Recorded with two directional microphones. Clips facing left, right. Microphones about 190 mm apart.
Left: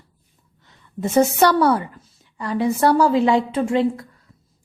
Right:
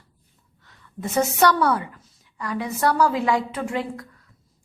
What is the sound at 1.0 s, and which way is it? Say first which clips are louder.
A woman's voice: left 4 dB; 30° left (ahead or behind).